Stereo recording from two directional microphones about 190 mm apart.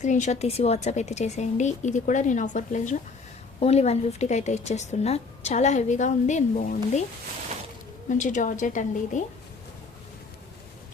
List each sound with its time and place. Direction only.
0.0 s a woman's voice: 40° left (ahead or behind)
8.1 s a woman's voice: 40° left (ahead or behind)